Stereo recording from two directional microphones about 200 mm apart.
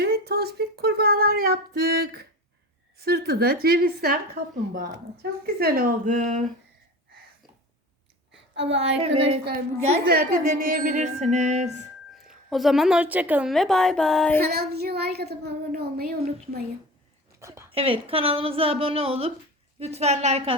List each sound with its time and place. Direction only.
0.0 s speech: 50° right (ahead or behind)
3.0 s child singing: 50° right (ahead or behind)
5.5 s music: 50° right (ahead or behind)
9.0 s music: 30° right (ahead or behind)
10.1 s music: 50° right (ahead or behind)
12.1 s a woman's voice: centre (ahead or behind)
14.4 s child singing: 50° right (ahead or behind)
17.4 s a sound: 15° right (ahead or behind)
17.7 s a woman's voice: 30° right (ahead or behind)
19.8 s music: 30° right (ahead or behind)